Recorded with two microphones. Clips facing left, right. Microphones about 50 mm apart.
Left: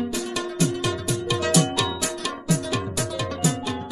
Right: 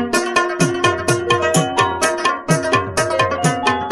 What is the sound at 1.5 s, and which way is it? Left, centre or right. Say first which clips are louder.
Music: right 6 dB; right.